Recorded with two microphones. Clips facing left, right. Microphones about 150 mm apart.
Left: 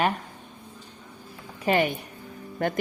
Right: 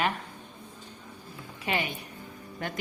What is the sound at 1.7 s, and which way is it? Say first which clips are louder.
Speech: left 8 dB; 50° left (ahead or behind).